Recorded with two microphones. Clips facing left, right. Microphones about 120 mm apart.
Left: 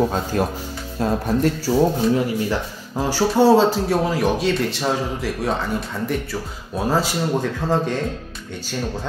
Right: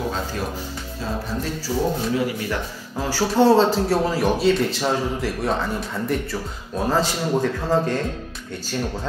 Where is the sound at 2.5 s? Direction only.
20° left (ahead or behind).